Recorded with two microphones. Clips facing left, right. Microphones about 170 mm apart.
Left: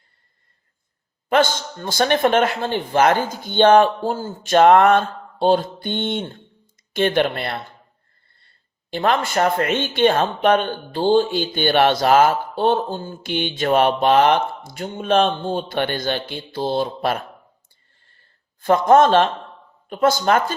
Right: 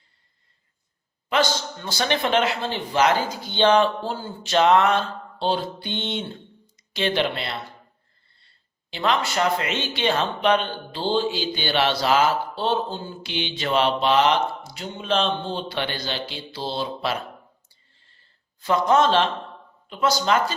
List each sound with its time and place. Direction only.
1.3 s speech: 50° left (ahead or behind)
17.7 s a sound: 50° left (ahead or behind)
19.9 s speech: 50° left (ahead or behind)